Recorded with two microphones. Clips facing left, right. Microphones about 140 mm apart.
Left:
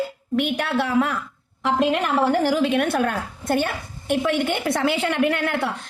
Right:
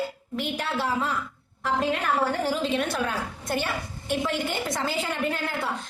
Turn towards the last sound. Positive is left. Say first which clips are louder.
# left 7 dB
turn(degrees=70)  # may be behind; listen again after turning